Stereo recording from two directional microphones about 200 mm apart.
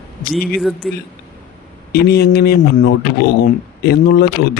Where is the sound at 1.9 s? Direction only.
50° left (ahead or behind).